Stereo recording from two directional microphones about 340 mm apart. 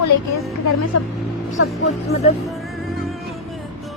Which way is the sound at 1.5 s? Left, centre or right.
Left.